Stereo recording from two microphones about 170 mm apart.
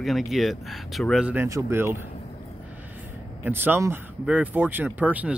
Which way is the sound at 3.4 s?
10° right (ahead or behind).